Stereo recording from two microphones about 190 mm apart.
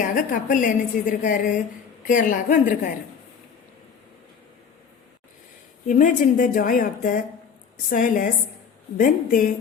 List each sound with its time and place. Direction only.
0.0 s a woman's voice: 45° left (ahead or behind)
5.9 s a woman's voice: 45° left (ahead or behind)